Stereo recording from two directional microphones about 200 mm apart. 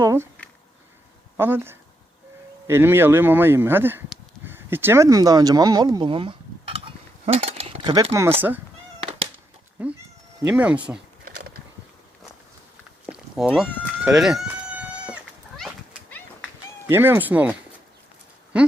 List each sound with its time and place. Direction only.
0.0 s speech: 15° right (ahead or behind)
1.4 s speech: 10° right (ahead or behind)
9.8 s speech: 5° right (ahead or behind)
13.1 s a sound: 5° right (ahead or behind)
14.0 s chicken: 5° right (ahead or behind)
16.8 s speech: 10° right (ahead or behind)
18.5 s speech: 5° right (ahead or behind)